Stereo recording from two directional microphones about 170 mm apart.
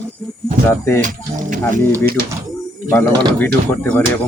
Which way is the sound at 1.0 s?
50° right (ahead or behind).